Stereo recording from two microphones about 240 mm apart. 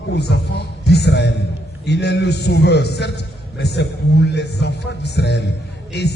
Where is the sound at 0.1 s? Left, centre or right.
Left.